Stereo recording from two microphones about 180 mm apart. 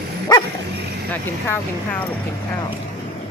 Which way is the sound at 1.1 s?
10° left (ahead or behind).